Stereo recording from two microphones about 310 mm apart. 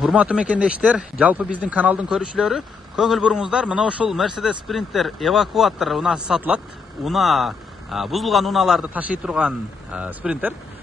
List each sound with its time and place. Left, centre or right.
0.0 s speech: centre